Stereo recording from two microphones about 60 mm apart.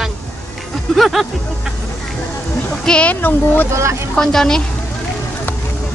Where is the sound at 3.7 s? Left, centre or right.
Right.